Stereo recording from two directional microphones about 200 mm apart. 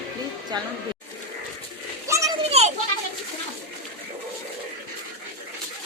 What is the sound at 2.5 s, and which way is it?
Children playing, 30° right (ahead or behind).